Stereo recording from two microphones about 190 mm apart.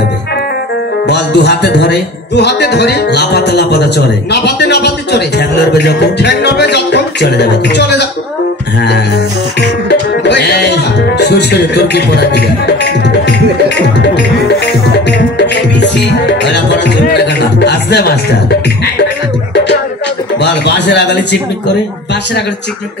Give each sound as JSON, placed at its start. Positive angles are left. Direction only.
{"t": 1.0, "sound": "music", "side_deg": 65}
{"t": 9.6, "sound": "music", "side_deg": 65}
{"t": 15.0, "sound": "music", "side_deg": 65}
{"t": 20.3, "sound": "music", "side_deg": 65}